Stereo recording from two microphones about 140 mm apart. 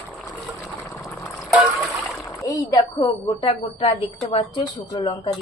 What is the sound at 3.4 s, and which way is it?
Speech, 40° left (ahead or behind).